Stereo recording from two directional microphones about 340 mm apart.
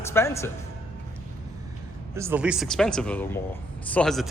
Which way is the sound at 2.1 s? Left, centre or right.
Centre.